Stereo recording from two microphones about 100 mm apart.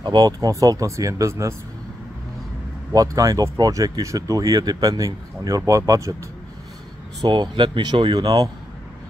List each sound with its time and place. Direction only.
0.0 s speech: 45° right (ahead or behind); by 1.5 s 30° right (ahead or behind)
2.9 s speech: 35° right (ahead or behind)
7.2 s speech: 50° right (ahead or behind)
8.2 s speech: 40° right (ahead or behind)